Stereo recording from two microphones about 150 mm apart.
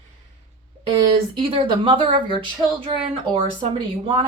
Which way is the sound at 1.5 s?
35° right (ahead or behind).